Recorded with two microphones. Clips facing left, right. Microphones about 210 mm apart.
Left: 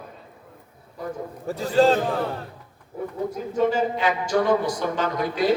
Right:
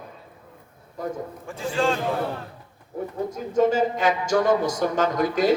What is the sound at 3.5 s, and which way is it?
A woman's voice, 45° right (ahead or behind).